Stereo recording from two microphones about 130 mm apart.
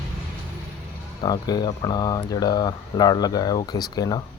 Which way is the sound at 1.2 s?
30° left (ahead or behind).